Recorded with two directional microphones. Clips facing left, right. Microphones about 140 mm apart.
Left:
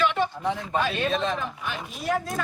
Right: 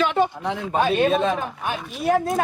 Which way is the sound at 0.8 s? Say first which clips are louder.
Right 9 dB; 55° right (ahead or behind).